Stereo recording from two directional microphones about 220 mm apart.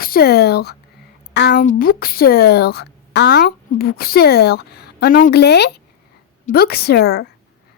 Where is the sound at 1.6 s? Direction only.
40° left (ahead or behind).